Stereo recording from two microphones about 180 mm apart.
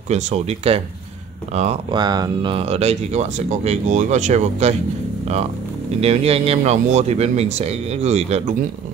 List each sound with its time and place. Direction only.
0.1 s speech: 40° right (ahead or behind)
2.0 s speech: 25° right (ahead or behind); by 4.7 s 40° right (ahead or behind)
5.9 s speech: 35° right (ahead or behind)